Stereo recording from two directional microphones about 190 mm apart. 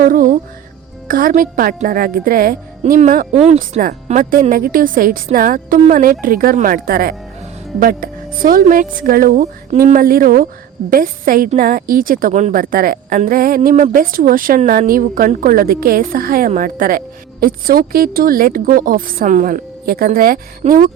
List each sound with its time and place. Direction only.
0.0 s a woman's voice: 45° right (ahead or behind)